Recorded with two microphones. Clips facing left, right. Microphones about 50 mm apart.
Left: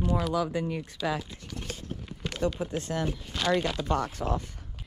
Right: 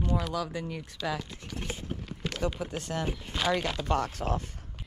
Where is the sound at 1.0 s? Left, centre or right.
Centre.